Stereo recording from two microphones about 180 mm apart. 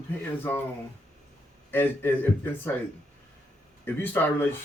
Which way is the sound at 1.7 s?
10° left (ahead or behind).